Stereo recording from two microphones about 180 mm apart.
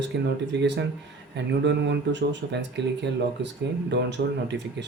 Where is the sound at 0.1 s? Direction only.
70° right (ahead or behind).